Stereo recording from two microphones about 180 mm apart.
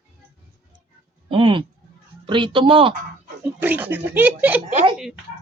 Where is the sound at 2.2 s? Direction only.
25° right (ahead or behind).